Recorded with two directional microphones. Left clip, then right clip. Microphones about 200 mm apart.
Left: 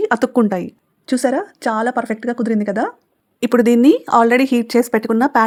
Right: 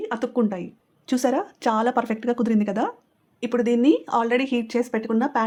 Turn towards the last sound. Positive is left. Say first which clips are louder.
# left 8 dB
turn(degrees=45)  # may be behind; listen again after turning